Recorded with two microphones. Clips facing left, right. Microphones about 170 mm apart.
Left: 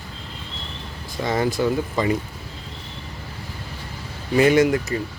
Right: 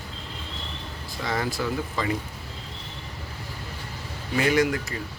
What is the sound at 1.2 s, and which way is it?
Speech, 20° left (ahead or behind).